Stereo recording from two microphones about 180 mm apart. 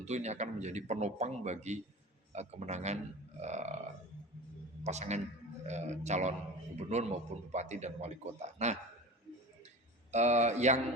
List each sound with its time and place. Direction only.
0.0 s speech: 40° right (ahead or behind)
4.8 s a man's voice: 40° right (ahead or behind)
10.1 s speech: 40° right (ahead or behind)